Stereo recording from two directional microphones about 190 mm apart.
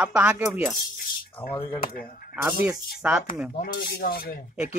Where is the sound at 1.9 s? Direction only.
50° left (ahead or behind).